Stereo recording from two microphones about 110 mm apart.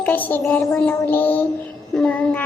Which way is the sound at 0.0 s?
15° left (ahead or behind).